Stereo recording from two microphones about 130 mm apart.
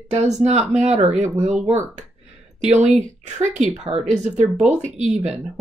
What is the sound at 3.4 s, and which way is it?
Speech, 65° right (ahead or behind).